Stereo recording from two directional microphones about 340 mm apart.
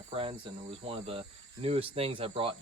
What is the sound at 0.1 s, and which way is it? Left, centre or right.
Speech, centre.